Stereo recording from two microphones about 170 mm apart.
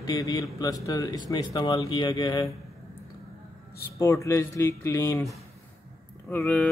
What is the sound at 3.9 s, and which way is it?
A man's voice, 15° left (ahead or behind).